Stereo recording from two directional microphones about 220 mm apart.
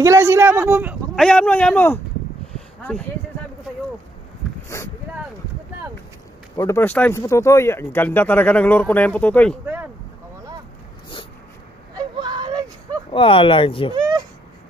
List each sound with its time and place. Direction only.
0.0 s a man's voice: 10° right (ahead or behind)
1.2 s speech: 5° left (ahead or behind)
4.7 s boat: 10° left (ahead or behind)
6.5 s speech: 10° left (ahead or behind)
11.9 s a sound: 20° right (ahead or behind)
13.1 s speech: 25° left (ahead or behind)